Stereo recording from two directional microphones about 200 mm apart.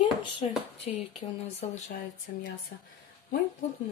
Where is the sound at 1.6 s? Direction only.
35° left (ahead or behind).